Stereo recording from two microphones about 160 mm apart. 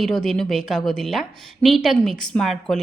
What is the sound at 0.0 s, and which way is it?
A woman's voice, centre (ahead or behind).